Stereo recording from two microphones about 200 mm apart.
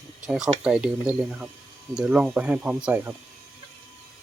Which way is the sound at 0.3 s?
5° right (ahead or behind).